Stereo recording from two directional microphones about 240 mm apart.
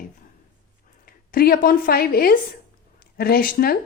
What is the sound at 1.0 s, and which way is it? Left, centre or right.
A woman's voice, left.